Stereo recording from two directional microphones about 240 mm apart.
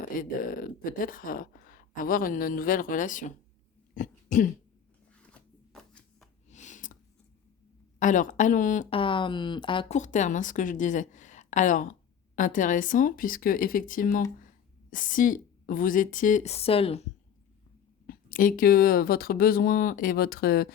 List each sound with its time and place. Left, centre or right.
0.1 s speech: left
3.9 s dog: left
5.1 s a sound: centre
6.5 s a sound: left
7.9 s speech: left
18.0 s speech: left